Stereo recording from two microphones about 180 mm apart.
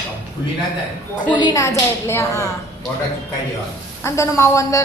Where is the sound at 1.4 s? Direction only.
20° left (ahead or behind).